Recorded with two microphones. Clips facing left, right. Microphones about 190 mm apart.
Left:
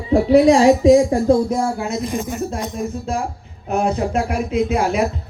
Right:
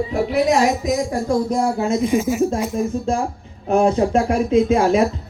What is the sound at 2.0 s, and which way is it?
Speech, centre (ahead or behind).